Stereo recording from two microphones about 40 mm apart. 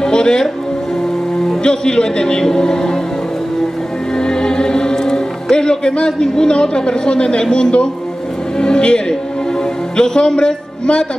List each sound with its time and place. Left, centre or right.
0.0 s music: centre
1.6 s a man's voice: left
4.1 s music: centre
8.5 s a man's voice: left